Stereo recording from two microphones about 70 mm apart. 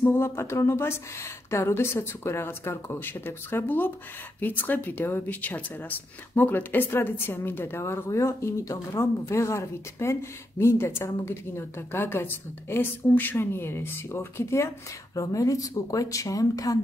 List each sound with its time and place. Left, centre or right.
0.0 s speech: left